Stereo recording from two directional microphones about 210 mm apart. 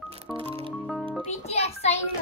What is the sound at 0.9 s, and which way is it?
Music, centre (ahead or behind).